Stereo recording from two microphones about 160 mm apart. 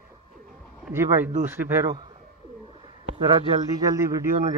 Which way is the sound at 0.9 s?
15° right (ahead or behind).